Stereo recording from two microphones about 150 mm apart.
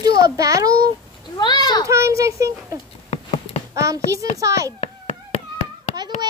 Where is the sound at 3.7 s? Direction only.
20° right (ahead or behind).